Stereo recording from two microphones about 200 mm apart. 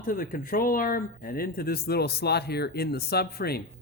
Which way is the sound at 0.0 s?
45° left (ahead or behind).